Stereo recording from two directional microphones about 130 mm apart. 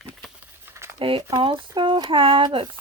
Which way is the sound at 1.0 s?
45° right (ahead or behind).